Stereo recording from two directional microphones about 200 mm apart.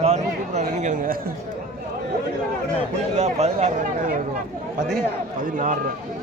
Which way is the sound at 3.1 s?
35° right (ahead or behind).